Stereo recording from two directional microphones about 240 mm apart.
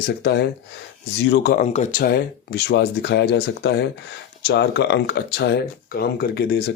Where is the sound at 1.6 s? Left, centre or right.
Left.